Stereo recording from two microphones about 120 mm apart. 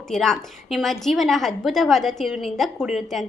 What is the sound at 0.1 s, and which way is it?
A woman's voice, centre (ahead or behind).